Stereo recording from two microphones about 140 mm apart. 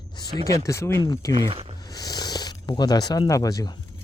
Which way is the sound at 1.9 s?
30° left (ahead or behind).